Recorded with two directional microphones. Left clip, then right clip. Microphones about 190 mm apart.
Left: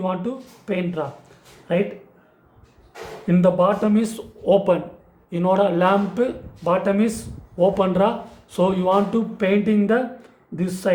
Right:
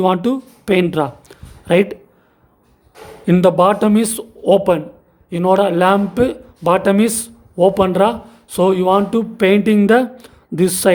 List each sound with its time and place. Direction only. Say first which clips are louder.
0.0 s speech: right 10 dB; 60° right (ahead or behind)
3.2 s speech: right 6 dB; 55° right (ahead or behind)